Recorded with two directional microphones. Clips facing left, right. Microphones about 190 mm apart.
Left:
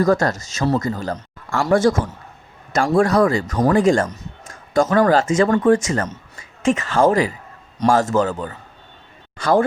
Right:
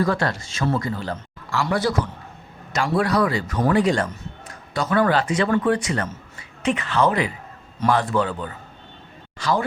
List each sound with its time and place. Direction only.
0.0 s a woman's voice: 45° left (ahead or behind)